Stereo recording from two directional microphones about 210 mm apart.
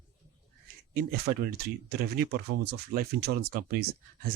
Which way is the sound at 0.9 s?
50° right (ahead or behind).